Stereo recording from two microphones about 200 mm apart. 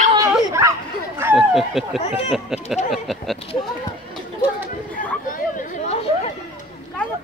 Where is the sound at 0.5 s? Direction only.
15° right (ahead or behind).